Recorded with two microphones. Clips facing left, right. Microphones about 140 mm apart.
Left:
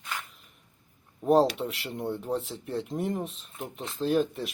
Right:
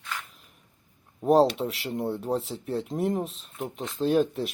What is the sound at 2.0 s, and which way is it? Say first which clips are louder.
Mantra: right 2 dB; 35° right (ahead or behind).